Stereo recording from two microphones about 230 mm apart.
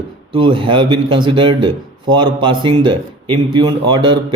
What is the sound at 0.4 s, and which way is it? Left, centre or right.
Speech, right.